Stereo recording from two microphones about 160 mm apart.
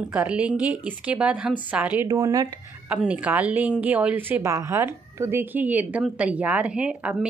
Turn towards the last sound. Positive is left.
turn(degrees=-5)  # may be behind; listen again after turning